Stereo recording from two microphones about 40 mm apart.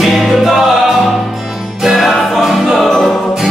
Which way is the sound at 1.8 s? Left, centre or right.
Centre.